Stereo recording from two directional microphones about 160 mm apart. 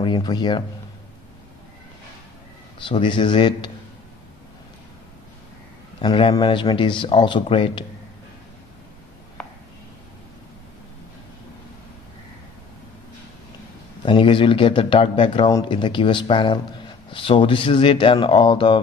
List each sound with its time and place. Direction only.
0.0 s speech: 30° left (ahead or behind)
2.8 s speech: 30° left (ahead or behind)
5.9 s a man's voice: 35° left (ahead or behind)
9.4 s a sound: 5° left (ahead or behind)
14.0 s speech: 30° left (ahead or behind)